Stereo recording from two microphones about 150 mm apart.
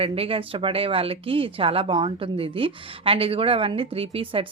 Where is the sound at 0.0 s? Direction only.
40° right (ahead or behind).